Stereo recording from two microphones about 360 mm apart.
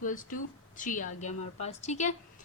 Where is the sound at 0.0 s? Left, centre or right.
Left.